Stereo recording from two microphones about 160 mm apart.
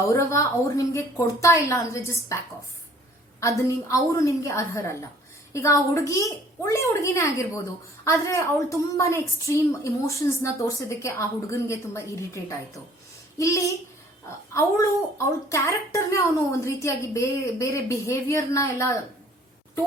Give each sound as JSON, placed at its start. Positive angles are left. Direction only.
{"t": 0.1, "sound": "a woman's voice", "side_deg": 20}
{"t": 3.4, "sound": "a woman's voice", "side_deg": 20}
{"t": 15.4, "sound": "a woman's voice", "side_deg": 20}